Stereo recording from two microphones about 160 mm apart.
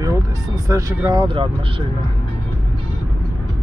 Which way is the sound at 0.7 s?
20° right (ahead or behind).